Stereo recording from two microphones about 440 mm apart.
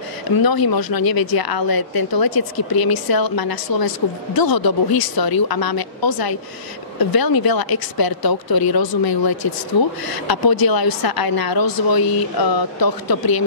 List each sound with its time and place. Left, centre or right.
0.4 s a woman's voice: left